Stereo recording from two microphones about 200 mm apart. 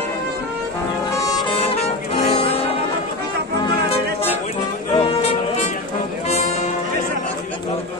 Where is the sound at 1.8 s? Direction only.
30° left (ahead or behind).